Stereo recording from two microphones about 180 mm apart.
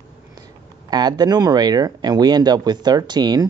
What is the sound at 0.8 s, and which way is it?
Speech, 20° right (ahead or behind).